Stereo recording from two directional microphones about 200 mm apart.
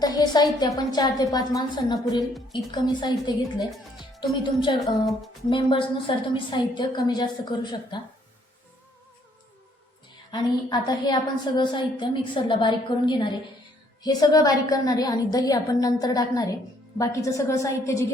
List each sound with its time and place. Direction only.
0.0 s a woman's voice: 20° left (ahead or behind)
4.8 s music: centre (ahead or behind)
5.5 s a woman's voice: 25° left (ahead or behind)
10.3 s a woman's voice: 20° left (ahead or behind)